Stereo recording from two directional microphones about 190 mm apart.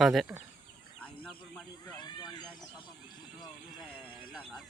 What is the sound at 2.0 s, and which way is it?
Cat, 20° left (ahead or behind).